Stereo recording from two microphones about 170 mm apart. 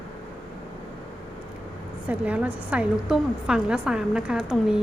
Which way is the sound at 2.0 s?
10° right (ahead or behind).